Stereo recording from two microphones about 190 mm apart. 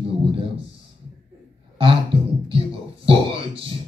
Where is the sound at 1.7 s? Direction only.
30° right (ahead or behind).